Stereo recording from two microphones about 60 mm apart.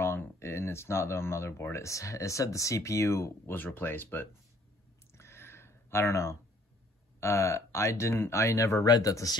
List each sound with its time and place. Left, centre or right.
0.0 s speech: left
3.4 s speech: left
5.1 s a sound: left
7.2 s speech: left
8.8 s speech: left